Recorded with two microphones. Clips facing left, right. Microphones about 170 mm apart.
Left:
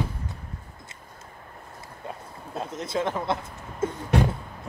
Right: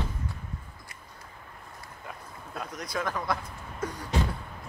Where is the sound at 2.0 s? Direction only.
25° left (ahead or behind).